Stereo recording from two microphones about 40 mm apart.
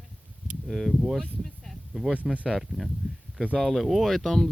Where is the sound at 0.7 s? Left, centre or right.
Centre.